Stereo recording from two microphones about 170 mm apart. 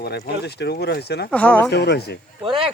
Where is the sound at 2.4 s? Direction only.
30° right (ahead or behind).